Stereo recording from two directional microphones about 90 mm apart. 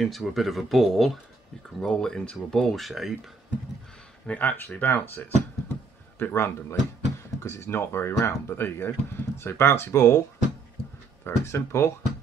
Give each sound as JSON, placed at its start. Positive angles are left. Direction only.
{"t": 0.0, "sound": "speech", "side_deg": 0}
{"t": 4.3, "sound": "speech", "side_deg": 15}
{"t": 5.1, "sound": "a sound", "side_deg": 25}
{"t": 7.4, "sound": "speech", "side_deg": 30}
{"t": 11.2, "sound": "speech", "side_deg": 30}